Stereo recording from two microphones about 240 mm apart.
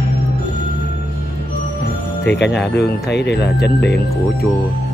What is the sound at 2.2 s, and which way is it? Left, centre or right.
Speech, left.